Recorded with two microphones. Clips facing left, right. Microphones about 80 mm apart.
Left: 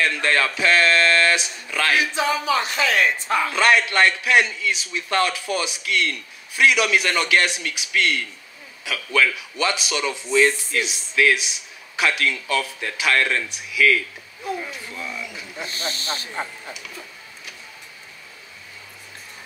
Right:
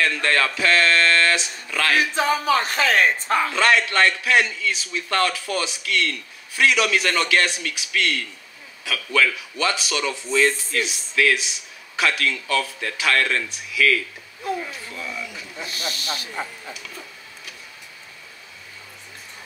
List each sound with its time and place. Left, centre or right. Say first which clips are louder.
0.0 s a man's voice: even; left
2.0 s speech: right 1 dB; right
3.5 s a man's voice: left 2 dB; centre
15.6 s speech: left 1 dB; left